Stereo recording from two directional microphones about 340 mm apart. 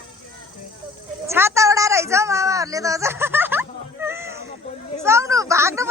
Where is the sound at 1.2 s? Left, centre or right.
Centre.